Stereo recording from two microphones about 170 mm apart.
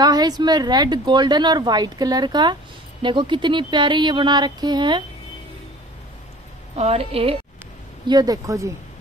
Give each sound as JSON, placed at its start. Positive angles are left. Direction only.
{"t": 0.0, "sound": "a woman's voice", "side_deg": -25}
{"t": 6.7, "sound": "a woman's voice", "side_deg": -35}
{"t": 8.1, "sound": "a woman's voice", "side_deg": -25}